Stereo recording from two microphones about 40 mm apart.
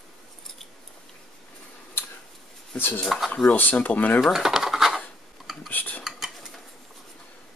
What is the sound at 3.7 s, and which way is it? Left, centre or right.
Speech, left.